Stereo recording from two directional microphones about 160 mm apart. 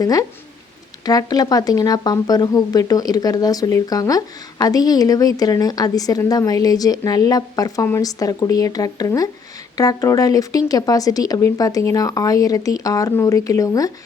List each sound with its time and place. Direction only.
0.0 s speech: 25° left (ahead or behind)